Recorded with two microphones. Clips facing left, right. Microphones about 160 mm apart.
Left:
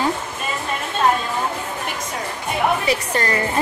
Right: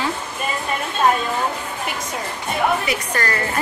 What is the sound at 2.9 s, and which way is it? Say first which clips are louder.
Speech: left 2 dB; 25° left (ahead or behind).